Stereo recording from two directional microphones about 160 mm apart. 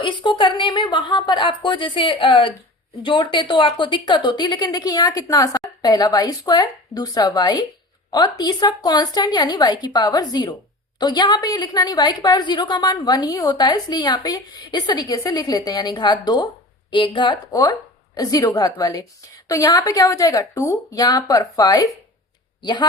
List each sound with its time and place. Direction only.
0.0 s a woman's voice: 30° left (ahead or behind)